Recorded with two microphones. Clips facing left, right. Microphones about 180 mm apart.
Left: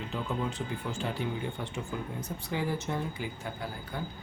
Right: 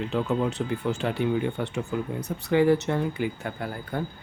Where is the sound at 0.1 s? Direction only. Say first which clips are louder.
Right 7 dB; 70° right (ahead or behind).